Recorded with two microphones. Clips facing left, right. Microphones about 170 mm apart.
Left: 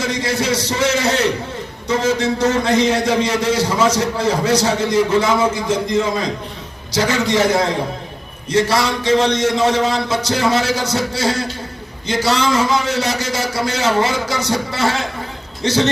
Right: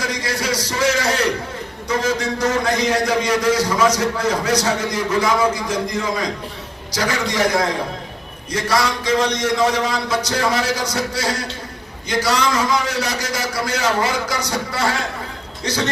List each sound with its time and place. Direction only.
0.0 s a man's voice: 25° left (ahead or behind)